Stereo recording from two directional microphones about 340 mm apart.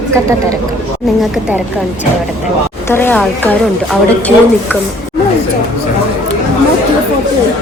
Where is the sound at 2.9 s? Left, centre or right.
Centre.